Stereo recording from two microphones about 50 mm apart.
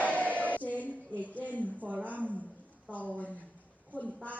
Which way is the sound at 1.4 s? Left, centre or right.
Right.